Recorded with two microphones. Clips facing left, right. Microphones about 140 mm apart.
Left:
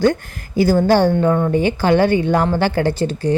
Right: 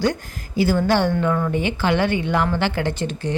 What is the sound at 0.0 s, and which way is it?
A woman's voice, 50° left (ahead or behind).